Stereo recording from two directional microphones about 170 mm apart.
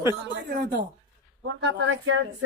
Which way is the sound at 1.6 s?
90° right.